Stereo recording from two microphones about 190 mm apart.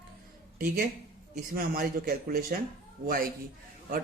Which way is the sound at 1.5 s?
50° right (ahead or behind).